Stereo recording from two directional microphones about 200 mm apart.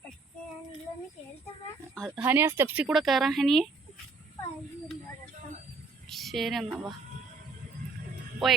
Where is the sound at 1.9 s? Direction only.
Centre (ahead or behind).